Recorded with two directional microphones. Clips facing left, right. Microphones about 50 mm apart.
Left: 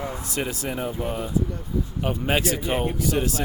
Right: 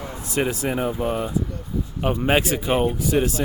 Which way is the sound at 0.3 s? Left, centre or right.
Right.